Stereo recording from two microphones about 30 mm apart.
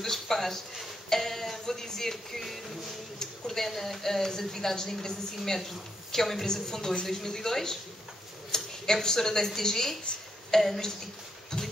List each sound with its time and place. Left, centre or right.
0.0 s speech: centre
1.1 s music: centre
3.2 s a woman's voice: centre
6.4 s a woman's voice: centre